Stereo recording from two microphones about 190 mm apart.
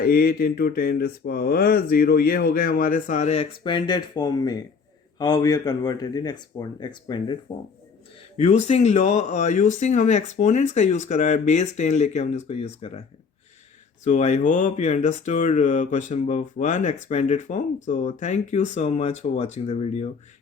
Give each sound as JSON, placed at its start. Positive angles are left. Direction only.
{"t": 0.0, "sound": "speech", "side_deg": 55}
{"t": 8.4, "sound": "speech", "side_deg": 35}